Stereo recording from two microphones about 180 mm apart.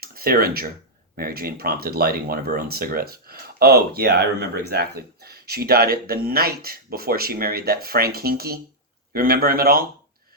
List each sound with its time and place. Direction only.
0.0 s speech: 55° right (ahead or behind)